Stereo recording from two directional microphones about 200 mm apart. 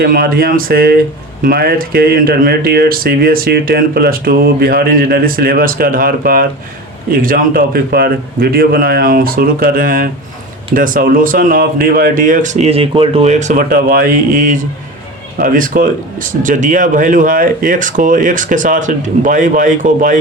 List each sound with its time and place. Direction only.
0.0 s speech: 45° right (ahead or behind)